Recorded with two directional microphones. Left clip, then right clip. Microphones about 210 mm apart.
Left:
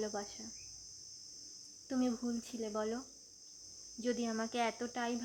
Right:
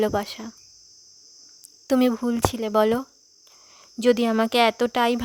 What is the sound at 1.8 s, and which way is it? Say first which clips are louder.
Speech: right 16 dB; 55° right (ahead or behind).